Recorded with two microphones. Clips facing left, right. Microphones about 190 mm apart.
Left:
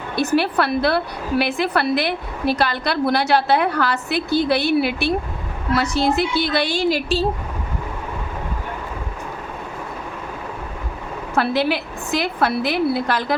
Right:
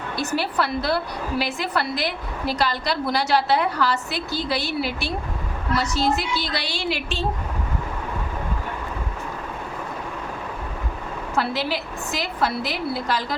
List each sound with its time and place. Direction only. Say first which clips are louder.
0.2 s a woman's voice: left 6 dB; 60° left (ahead or behind); by 7.3 s 40° left (ahead or behind)
11.3 s a woman's voice: left 6 dB; 60° left (ahead or behind)